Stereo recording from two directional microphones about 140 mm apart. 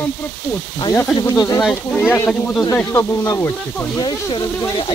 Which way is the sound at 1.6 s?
5° left (ahead or behind).